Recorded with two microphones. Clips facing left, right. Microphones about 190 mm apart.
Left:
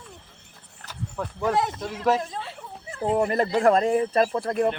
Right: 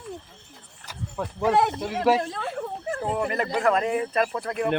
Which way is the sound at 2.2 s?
60° right (ahead or behind).